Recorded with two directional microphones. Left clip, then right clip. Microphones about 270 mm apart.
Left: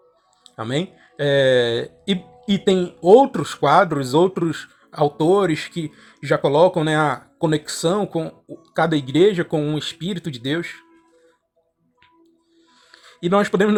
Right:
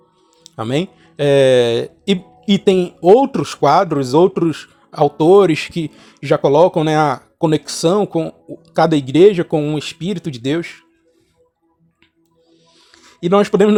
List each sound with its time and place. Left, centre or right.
0.5 s speech: right
12.9 s speech: centre